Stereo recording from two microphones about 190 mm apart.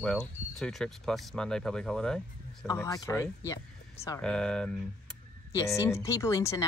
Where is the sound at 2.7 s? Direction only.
15° left (ahead or behind).